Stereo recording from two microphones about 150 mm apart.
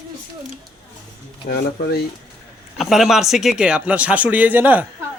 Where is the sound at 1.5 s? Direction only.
90° left.